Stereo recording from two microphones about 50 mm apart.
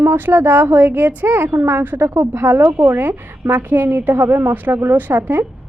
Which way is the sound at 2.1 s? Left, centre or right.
Right.